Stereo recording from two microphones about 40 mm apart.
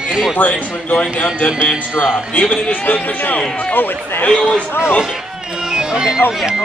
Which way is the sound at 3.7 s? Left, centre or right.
Left.